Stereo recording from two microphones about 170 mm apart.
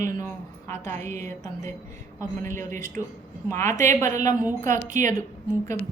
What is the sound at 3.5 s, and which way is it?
Speech, 15° left (ahead or behind).